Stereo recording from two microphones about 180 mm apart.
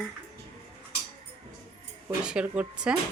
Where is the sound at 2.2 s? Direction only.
5° right (ahead or behind).